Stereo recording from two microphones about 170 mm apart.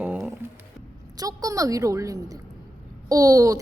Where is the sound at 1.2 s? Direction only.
20° right (ahead or behind).